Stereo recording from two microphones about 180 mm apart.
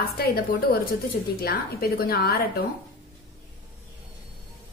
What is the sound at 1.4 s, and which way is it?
A woman's voice, 55° left (ahead or behind).